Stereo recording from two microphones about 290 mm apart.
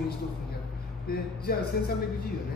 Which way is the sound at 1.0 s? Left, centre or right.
Left.